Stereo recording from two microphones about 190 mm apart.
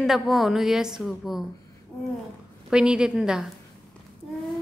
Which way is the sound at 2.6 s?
5° right (ahead or behind).